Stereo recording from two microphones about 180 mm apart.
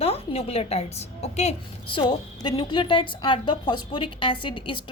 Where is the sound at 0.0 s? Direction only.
35° left (ahead or behind).